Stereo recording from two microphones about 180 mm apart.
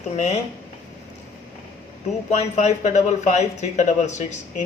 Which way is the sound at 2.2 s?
40° left (ahead or behind).